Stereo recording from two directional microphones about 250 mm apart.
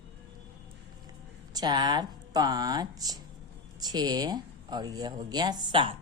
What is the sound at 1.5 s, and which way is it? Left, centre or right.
Speech, centre.